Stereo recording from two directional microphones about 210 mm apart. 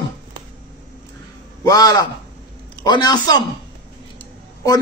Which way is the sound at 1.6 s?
15° left (ahead or behind).